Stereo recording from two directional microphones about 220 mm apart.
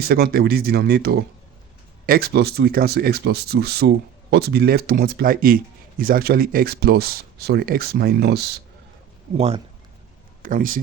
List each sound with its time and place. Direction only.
0.0 s speech: 45° right (ahead or behind)
10.4 s speech: 40° right (ahead or behind)